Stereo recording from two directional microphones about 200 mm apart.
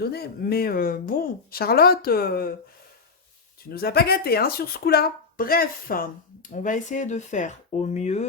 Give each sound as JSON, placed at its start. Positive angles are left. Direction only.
{"t": 0.0, "sound": "speech", "side_deg": 50}
{"t": 3.7, "sound": "speech", "side_deg": 50}